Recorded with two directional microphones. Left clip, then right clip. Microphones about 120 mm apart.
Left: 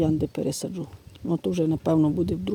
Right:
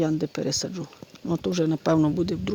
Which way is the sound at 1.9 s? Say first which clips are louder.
Even; 5° left (ahead or behind).